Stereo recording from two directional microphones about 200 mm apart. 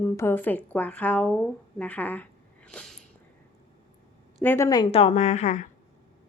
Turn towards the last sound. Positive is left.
turn(degrees=35)  # may be behind; listen again after turning